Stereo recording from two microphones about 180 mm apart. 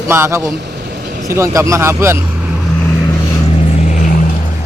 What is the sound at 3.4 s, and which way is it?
Vehicle, 35° left (ahead or behind).